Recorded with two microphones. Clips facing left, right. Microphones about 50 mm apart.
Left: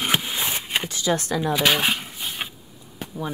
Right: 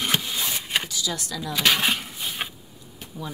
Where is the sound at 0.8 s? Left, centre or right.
Left.